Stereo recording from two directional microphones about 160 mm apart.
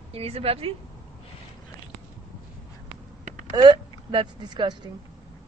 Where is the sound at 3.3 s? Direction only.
50° right (ahead or behind).